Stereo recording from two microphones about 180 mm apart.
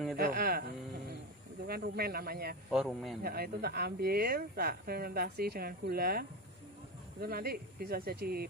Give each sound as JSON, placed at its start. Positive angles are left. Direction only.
{"t": 0.2, "sound": "speech", "side_deg": -55}
{"t": 1.7, "sound": "speech", "side_deg": -60}
{"t": 2.7, "sound": "speech", "side_deg": 0}
{"t": 3.2, "sound": "speech", "side_deg": -55}